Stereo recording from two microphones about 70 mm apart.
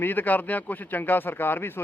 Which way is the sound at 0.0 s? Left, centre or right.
Left.